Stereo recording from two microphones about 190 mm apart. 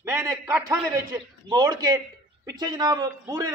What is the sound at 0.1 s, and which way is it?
A man's voice, 15° right (ahead or behind).